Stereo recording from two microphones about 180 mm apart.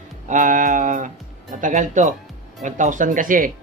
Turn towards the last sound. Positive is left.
turn(degrees=-50)  # may be behind; listen again after turning